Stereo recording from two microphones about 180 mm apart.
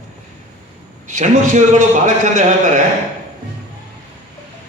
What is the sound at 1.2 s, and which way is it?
A man's voice, 40° right (ahead or behind).